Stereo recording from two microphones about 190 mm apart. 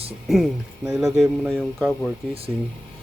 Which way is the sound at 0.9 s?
5° right (ahead or behind).